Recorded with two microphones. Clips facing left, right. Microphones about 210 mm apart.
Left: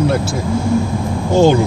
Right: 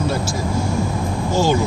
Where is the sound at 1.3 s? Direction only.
60° left (ahead or behind).